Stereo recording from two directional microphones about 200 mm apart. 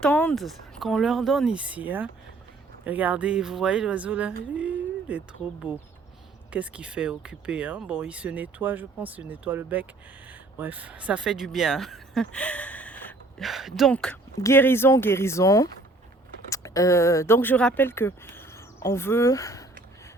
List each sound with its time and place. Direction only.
0.0 s speech: 5° left (ahead or behind)
4.5 s a sound: 5° right (ahead or behind)
5.7 s speech: 5° right (ahead or behind); by 19.6 s 15° left (ahead or behind)